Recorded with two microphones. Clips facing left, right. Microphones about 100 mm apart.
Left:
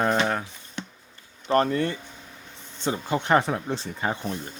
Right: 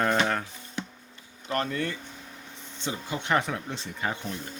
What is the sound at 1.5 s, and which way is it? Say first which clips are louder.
Speech: left 7 dB; 35° left (ahead or behind).